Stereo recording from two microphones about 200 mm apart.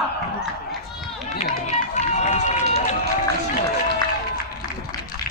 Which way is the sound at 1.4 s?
35° left (ahead or behind).